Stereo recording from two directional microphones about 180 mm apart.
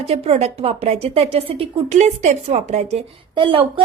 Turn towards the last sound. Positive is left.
turn(degrees=-30)  # may be behind; listen again after turning